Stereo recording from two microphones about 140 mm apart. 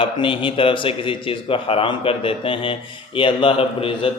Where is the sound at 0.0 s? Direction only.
40° left (ahead or behind).